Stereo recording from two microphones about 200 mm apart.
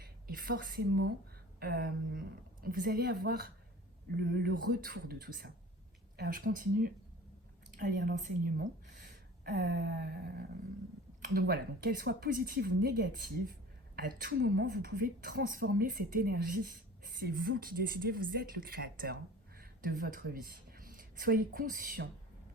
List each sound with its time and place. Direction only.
0.0 s a woman's voice: 45° right (ahead or behind)
9.0 s a sound: 50° right (ahead or behind)
11.3 s a woman's voice: 50° right (ahead or behind)